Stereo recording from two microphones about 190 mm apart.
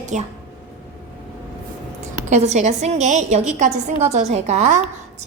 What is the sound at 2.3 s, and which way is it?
A woman's voice, 40° right (ahead or behind).